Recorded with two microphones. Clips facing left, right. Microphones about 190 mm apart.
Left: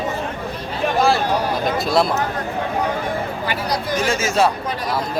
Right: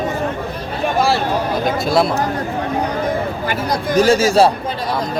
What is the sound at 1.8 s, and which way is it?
Speech, centre (ahead or behind).